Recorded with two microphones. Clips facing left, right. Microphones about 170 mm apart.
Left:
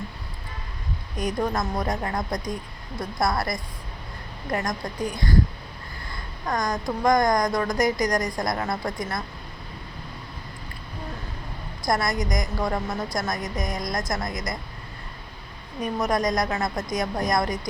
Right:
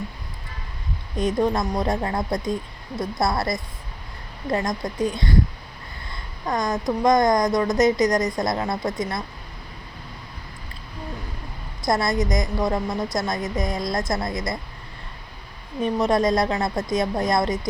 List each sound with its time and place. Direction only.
1.1 s a woman's voice: 25° right (ahead or behind)
6.4 s a woman's voice: 20° right (ahead or behind)
11.9 s a woman's voice: 25° right (ahead or behind)
15.8 s a woman's voice: 25° right (ahead or behind)